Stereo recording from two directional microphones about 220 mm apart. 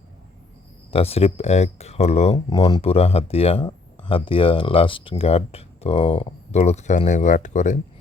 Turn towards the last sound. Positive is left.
turn(degrees=35)  # may be behind; listen again after turning